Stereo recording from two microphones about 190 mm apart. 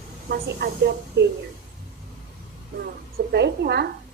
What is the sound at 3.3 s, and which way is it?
Speech, 60° right (ahead or behind).